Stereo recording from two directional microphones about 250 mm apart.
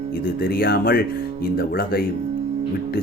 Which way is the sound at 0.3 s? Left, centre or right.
Left.